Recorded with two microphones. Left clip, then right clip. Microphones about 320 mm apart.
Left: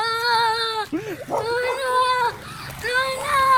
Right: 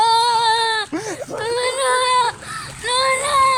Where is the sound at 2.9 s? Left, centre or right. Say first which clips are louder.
Right 4 dB; centre.